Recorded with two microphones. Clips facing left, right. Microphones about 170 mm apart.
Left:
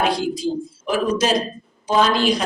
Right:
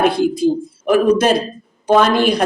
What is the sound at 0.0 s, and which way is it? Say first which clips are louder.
Speech: right 6 dB; 55° right (ahead or behind).